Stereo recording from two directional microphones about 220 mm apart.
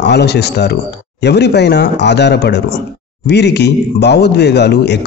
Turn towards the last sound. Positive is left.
turn(degrees=50)  # may be behind; listen again after turning